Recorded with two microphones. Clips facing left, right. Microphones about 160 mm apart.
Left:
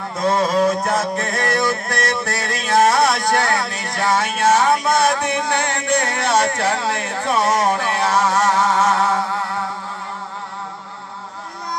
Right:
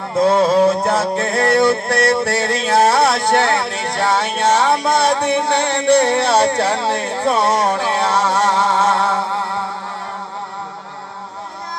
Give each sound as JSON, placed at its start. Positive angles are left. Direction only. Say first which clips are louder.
{"t": 0.1, "sound": "music", "louder": "right 5 dB", "side_deg": -30}